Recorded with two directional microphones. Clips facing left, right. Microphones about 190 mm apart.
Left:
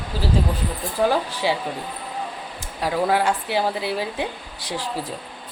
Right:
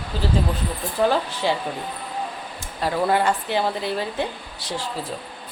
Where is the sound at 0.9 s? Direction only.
10° left (ahead or behind).